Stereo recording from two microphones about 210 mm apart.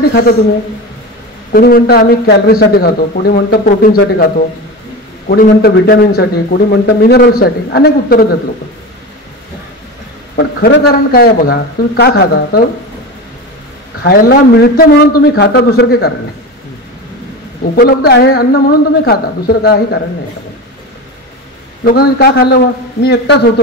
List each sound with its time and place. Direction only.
0.1 s a man's voice: 45° left (ahead or behind)
1.5 s a man's voice: 45° left (ahead or behind)
5.3 s a man's voice: 50° left (ahead or behind)
10.3 s a man's voice: 50° left (ahead or behind)
14.0 s a man's voice: 50° left (ahead or behind)
17.7 s a man's voice: 50° left (ahead or behind)
21.8 s a man's voice: 45° left (ahead or behind)